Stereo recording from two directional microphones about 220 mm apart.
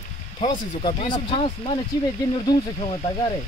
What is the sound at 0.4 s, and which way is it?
Speech, 20° left (ahead or behind).